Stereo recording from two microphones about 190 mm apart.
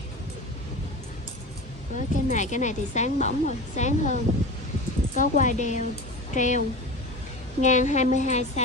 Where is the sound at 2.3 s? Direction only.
40° left (ahead or behind).